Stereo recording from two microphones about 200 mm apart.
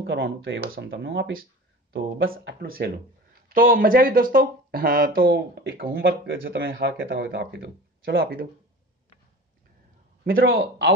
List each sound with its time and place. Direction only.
0.0 s speech: 60° right (ahead or behind)
1.9 s speech: 50° right (ahead or behind)
10.2 s a man's voice: 45° right (ahead or behind)